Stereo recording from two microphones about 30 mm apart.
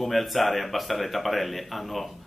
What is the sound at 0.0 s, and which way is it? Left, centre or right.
Speech, centre.